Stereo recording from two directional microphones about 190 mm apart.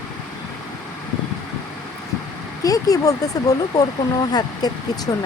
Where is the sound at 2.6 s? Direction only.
20° left (ahead or behind).